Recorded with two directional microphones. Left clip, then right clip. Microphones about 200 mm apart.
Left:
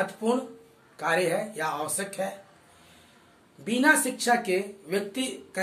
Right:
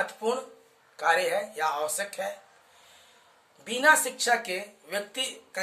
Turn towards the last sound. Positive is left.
turn(degrees=-20)  # may be behind; listen again after turning